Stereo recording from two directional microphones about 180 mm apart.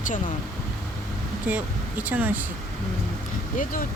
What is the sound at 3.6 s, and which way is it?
Speech, 50° left (ahead or behind).